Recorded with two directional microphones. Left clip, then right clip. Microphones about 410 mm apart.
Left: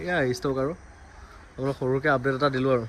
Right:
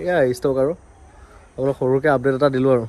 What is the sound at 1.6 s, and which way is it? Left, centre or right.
Speech, right.